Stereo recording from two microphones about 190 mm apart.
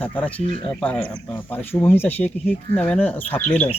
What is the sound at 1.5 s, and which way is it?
Speech, 10° left (ahead or behind).